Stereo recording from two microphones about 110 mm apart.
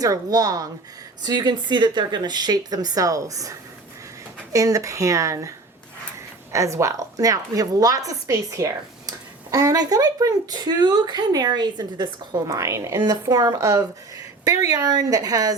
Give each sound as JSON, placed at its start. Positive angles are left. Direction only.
{"t": 0.0, "sound": "a woman's voice", "side_deg": -35}
{"t": 12.5, "sound": "a woman's voice", "side_deg": -30}